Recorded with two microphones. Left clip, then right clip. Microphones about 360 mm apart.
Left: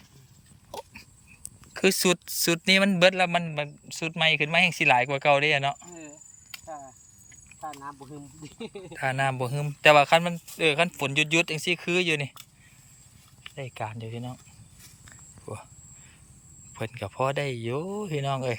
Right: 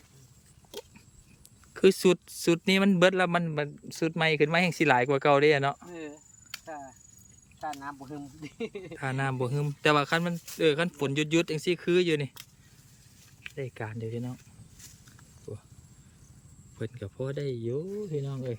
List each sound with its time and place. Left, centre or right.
1.7 s speech: centre
6.5 s cricket: centre
9.0 s a man's voice: centre
13.6 s speech: centre
16.7 s a man's voice: centre
17.7 s speech: left